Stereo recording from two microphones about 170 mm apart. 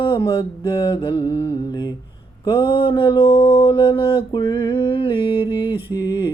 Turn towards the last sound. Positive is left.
turn(degrees=25)  # may be behind; listen again after turning